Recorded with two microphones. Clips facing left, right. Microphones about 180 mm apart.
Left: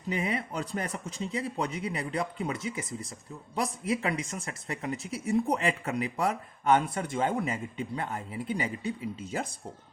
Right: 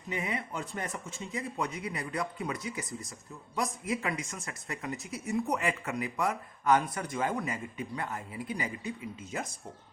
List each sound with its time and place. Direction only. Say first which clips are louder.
0.3 s speech: left 4 dB; 35° left (ahead or behind)